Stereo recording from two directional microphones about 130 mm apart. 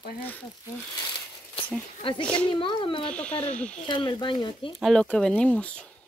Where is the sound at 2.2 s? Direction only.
10° left (ahead or behind).